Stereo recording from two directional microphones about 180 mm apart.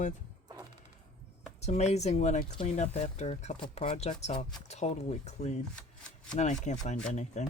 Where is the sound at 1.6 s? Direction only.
35° left (ahead or behind).